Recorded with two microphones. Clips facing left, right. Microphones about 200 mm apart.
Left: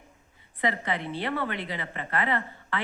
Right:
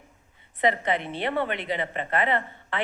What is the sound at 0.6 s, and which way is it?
A woman's voice, 20° right (ahead or behind).